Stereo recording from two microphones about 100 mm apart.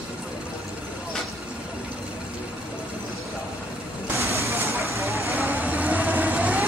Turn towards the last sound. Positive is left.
turn(degrees=-15)  # may be behind; listen again after turning